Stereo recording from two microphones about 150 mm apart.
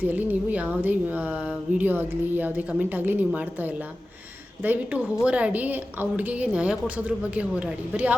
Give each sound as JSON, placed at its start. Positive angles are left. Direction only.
{"t": 0.0, "sound": "speech", "side_deg": -10}